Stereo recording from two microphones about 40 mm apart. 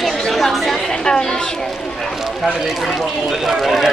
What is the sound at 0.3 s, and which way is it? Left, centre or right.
Chatter, centre.